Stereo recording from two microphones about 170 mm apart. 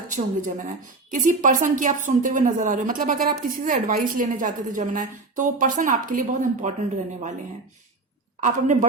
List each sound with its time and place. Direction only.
0.1 s a woman's voice: 50° right (ahead or behind)
8.4 s a woman's voice: 45° right (ahead or behind)